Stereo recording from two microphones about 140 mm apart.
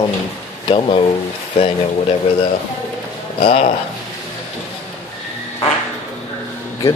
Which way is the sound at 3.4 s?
45° left (ahead or behind).